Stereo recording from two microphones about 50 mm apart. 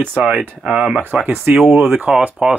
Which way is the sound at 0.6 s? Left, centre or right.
Centre.